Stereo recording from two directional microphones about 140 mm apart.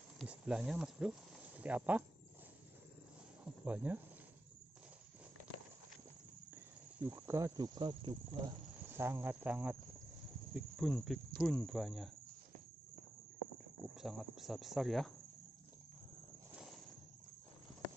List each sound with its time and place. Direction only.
0.2 s speech: 5° right (ahead or behind)
3.6 s speech: 10° right (ahead or behind)
6.5 s speech: 20° right (ahead or behind)
8.8 s speech: 15° right (ahead or behind)
10.5 s speech: centre (ahead or behind)
13.9 s speech: centre (ahead or behind)